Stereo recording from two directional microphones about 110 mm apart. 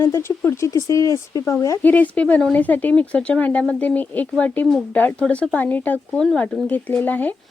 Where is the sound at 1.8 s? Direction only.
15° left (ahead or behind).